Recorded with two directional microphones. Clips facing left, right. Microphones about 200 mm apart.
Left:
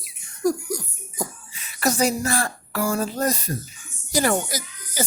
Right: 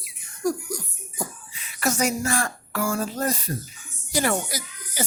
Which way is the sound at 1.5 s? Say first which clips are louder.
Left 3 dB; 40° left (ahead or behind).